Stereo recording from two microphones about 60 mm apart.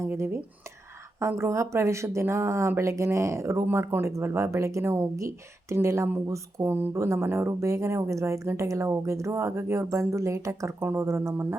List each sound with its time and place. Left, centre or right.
0.0 s speech: right
5.1 s a woman's voice: right